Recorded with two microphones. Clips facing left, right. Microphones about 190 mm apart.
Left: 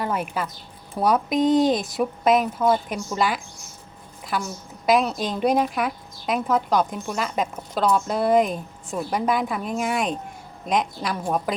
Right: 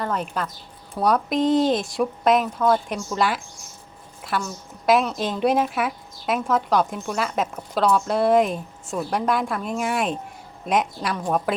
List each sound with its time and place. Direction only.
0.0 s speech: 10° left (ahead or behind)